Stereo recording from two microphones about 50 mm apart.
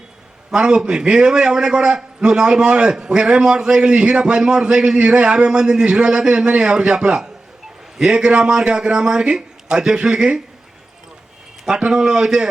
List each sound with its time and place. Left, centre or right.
0.5 s a man's voice: centre
11.8 s a man's voice: centre